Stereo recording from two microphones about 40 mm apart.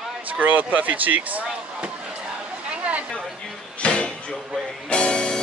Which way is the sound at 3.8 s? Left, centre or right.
Left.